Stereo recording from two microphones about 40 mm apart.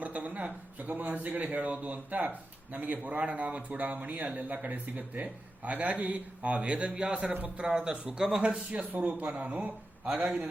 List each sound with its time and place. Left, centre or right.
0.0 s a man's voice: right
7.3 s a man's voice: right
7.6 s speech: centre
8.7 s a man's voice: right
9.0 s speech: right
9.4 s a man's voice: right